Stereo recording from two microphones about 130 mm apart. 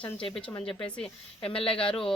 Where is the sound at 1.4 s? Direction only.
45° left (ahead or behind).